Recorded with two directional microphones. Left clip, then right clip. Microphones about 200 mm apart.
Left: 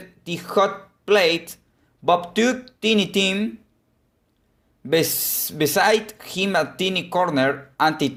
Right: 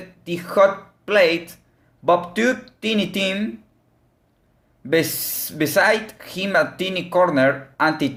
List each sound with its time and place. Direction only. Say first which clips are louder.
0.3 s speech: right 4 dB; 30° left (ahead or behind)
4.8 s speech: even; 30° left (ahead or behind)